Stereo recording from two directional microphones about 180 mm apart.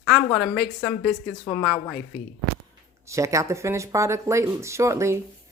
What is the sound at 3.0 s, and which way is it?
Speech, 15° right (ahead or behind).